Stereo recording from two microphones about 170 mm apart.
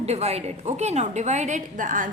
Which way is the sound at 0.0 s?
40° right (ahead or behind).